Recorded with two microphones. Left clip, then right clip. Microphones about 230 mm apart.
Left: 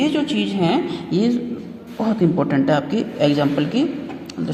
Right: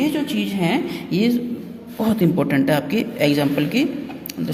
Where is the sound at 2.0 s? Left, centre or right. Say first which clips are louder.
Even; right.